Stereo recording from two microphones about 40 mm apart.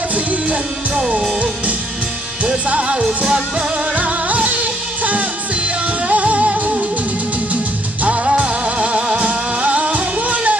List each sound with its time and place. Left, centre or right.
0.1 s music: right
2.4 s music: right
8.0 s music: right